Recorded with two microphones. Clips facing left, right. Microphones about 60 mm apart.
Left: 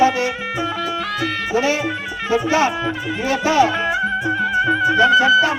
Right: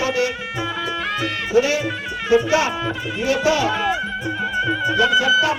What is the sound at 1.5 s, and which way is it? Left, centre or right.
Speech, left.